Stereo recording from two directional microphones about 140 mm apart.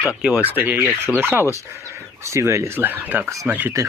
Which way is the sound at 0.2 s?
5° right (ahead or behind).